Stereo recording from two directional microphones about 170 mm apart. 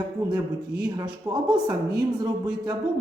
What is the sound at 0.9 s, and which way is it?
A woman's voice, 25° right (ahead or behind).